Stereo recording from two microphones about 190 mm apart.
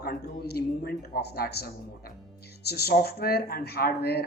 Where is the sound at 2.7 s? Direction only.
55° left (ahead or behind).